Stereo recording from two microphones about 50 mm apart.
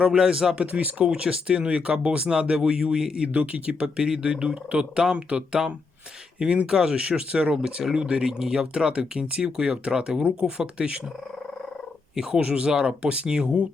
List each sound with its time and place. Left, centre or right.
0.0 s speech: centre
0.5 s speech: right
1.0 s speech: centre
3.2 s speech: right
12.1 s speech: centre